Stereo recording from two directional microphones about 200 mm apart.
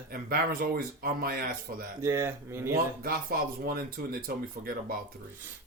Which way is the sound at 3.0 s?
45° right (ahead or behind).